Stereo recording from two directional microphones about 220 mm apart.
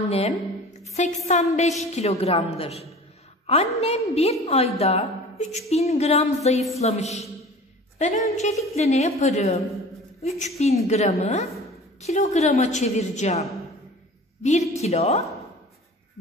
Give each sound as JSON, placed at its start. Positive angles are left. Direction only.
{"t": 0.9, "sound": "a woman's voice", "side_deg": 30}
{"t": 10.6, "sound": "a woman's voice", "side_deg": 30}